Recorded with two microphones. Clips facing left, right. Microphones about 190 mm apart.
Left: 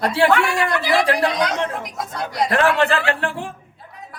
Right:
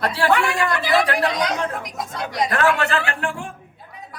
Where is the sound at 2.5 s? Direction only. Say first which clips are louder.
Left 3 dB; 30° left (ahead or behind).